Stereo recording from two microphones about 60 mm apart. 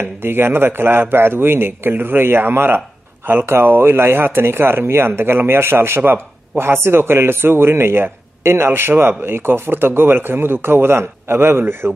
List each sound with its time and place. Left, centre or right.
0.0 s speech: right